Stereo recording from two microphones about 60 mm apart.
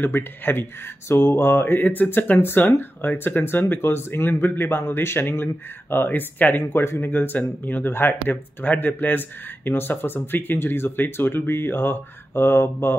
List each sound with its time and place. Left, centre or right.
0.0 s speech: left